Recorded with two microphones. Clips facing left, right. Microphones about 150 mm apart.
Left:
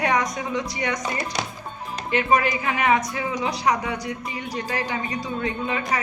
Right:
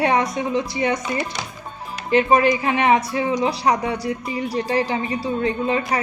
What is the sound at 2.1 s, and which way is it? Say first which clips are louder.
Speech: right 5 dB; 30° right (ahead or behind).